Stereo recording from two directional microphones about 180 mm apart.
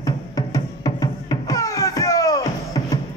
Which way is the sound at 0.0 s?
20° left (ahead or behind).